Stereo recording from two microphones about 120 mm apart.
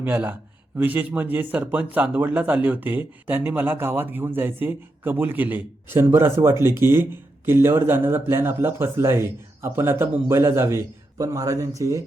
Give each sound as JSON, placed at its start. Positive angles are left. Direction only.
{"t": 0.0, "sound": "a man's voice", "side_deg": -15}